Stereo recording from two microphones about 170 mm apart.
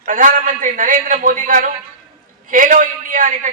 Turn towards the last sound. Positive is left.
turn(degrees=-50)  # may be behind; listen again after turning